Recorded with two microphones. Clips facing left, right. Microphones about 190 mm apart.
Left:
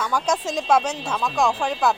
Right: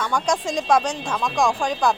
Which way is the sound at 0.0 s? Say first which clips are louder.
Right 1 dB; 5° left (ahead or behind).